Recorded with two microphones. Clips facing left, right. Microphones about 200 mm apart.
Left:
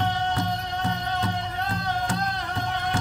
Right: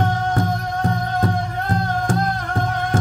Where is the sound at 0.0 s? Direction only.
45° right (ahead or behind).